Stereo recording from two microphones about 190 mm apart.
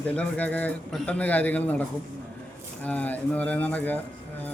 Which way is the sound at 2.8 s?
10° left (ahead or behind).